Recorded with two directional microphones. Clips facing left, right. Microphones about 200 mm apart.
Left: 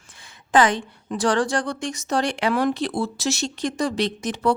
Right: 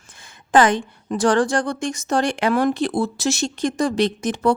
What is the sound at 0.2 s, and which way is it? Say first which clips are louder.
A woman's voice: right 2 dB; 45° right (ahead or behind).